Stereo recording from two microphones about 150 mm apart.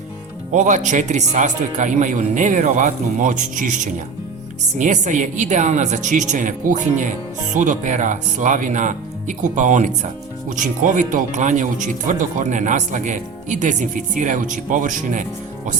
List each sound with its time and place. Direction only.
0.5 s speech: 55° right (ahead or behind)